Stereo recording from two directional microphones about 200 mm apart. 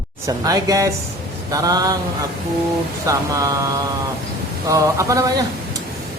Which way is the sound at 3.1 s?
15° right (ahead or behind).